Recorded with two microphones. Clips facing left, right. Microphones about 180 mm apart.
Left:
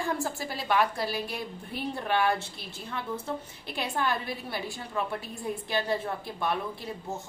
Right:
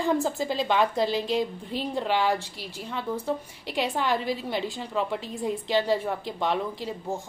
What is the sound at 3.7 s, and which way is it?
A woman's voice, 15° right (ahead or behind).